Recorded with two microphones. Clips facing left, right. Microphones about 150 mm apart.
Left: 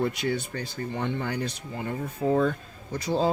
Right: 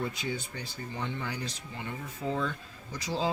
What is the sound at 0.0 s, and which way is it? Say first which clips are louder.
Speech: left 7 dB; 75° left (ahead or behind).